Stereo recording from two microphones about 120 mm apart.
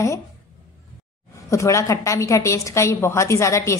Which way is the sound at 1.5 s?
25° left (ahead or behind).